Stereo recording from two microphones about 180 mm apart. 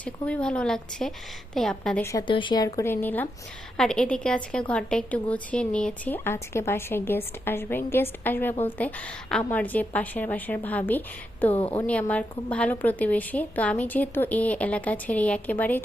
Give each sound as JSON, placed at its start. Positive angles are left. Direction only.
{"t": 0.0, "sound": "a woman's voice", "side_deg": 5}
{"t": 2.0, "sound": "a woman's voice", "side_deg": 15}
{"t": 2.2, "sound": "a woman's voice", "side_deg": 25}